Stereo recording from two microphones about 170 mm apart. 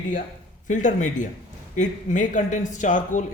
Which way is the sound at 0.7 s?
45° left (ahead or behind).